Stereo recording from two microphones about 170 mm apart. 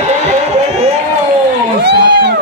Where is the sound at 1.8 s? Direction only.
80° right.